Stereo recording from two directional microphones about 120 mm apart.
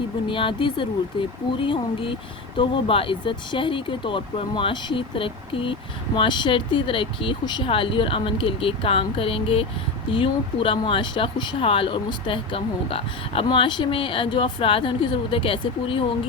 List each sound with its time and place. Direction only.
0.3 s speech: 45° left (ahead or behind)